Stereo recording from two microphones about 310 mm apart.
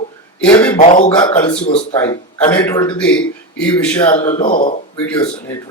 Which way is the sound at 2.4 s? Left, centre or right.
Centre.